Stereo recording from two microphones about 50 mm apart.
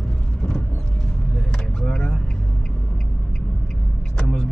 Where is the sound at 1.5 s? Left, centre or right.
Centre.